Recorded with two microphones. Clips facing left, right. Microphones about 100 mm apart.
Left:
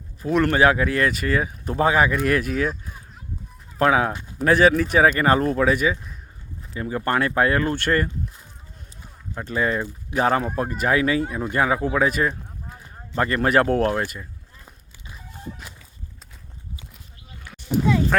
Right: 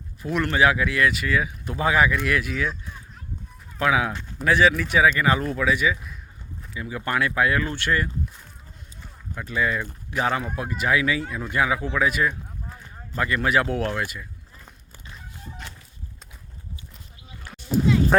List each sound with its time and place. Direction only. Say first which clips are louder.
0.2 s speech: left 3 dB; 40° left (ahead or behind)
4.1 s speech: left 1 dB; 15° left (ahead or behind)
4.4 s speech: left 3 dB; 40° left (ahead or behind)
9.3 s speech: left 2 dB; 35° left (ahead or behind)
11.3 s speech: left 4 dB; 20° left (ahead or behind)
11.5 s speech: left 2 dB; 40° left (ahead or behind)
14.6 s a sound: even; 5° left (ahead or behind)
18.1 s speech: right 3 dB; 20° right (ahead or behind)